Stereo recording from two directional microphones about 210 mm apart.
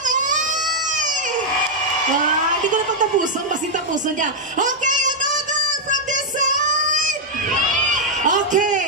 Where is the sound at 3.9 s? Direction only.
35° right (ahead or behind).